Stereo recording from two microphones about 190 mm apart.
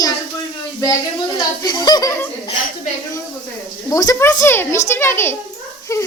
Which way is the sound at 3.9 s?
20° left (ahead or behind).